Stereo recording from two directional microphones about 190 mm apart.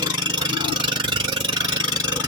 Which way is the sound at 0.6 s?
25° right (ahead or behind).